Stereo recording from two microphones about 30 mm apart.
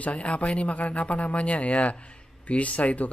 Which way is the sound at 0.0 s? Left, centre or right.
Left.